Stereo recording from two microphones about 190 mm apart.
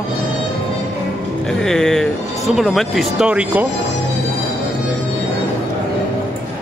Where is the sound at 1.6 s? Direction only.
5° left (ahead or behind).